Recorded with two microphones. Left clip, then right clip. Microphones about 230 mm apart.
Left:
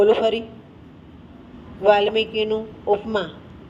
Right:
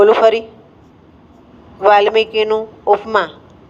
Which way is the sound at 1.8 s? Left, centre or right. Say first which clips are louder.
Right 6 dB; right.